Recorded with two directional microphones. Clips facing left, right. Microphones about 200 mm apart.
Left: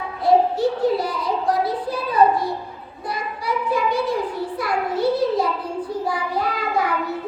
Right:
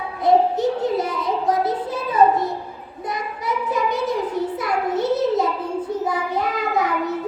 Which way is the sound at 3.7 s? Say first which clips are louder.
Left 1 dB; 20° right (ahead or behind).